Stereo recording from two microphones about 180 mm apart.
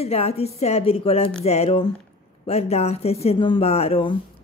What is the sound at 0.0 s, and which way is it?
A woman's voice, 35° left (ahead or behind).